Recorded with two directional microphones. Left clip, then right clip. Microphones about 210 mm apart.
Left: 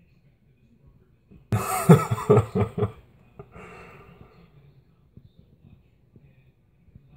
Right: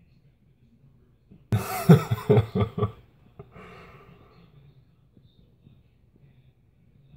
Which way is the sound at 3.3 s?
15° left (ahead or behind).